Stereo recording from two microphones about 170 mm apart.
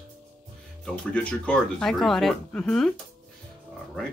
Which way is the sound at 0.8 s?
5° left (ahead or behind).